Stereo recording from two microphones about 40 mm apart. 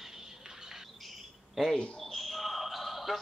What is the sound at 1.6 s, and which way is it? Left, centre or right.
Speech, centre.